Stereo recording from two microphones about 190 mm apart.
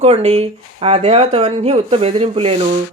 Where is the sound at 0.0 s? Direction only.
35° right (ahead or behind).